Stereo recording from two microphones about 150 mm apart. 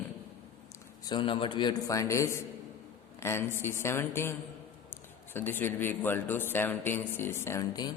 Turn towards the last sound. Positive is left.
turn(degrees=25)  # may be behind; listen again after turning